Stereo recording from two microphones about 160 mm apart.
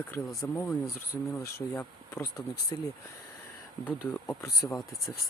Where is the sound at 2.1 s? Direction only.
15° left (ahead or behind).